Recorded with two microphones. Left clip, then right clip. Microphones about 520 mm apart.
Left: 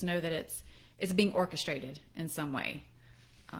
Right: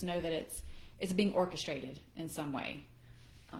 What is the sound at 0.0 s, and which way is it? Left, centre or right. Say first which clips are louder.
A woman's voice: left 2 dB; left.